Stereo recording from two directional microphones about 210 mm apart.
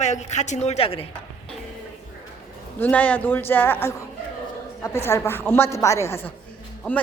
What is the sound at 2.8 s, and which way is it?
A woman's voice, 5° left (ahead or behind).